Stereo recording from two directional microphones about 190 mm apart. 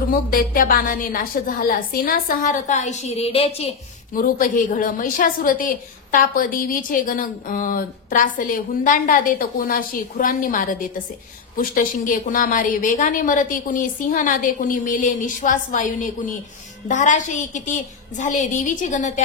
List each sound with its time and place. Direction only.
0.1 s a woman's voice: 50° left (ahead or behind); by 3.7 s 30° left (ahead or behind)
4.1 s a woman's voice: 45° left (ahead or behind)